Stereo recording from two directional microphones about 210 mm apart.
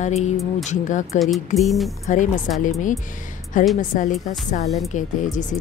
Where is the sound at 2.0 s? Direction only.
35° left (ahead or behind).